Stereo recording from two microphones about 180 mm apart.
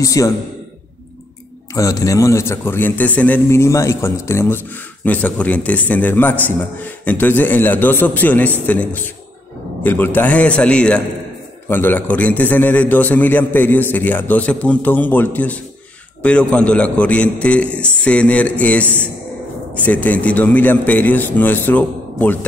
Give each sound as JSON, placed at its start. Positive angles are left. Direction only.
{"t": 0.0, "sound": "a man's voice", "side_deg": 20}
{"t": 1.7, "sound": "a man's voice", "side_deg": 20}